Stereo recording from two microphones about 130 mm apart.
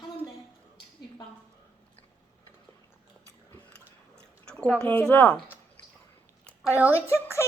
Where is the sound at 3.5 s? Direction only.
10° left (ahead or behind).